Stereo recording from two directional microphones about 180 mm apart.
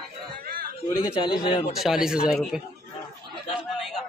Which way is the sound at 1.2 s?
25° left (ahead or behind).